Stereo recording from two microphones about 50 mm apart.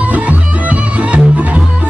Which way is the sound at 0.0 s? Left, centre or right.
Right.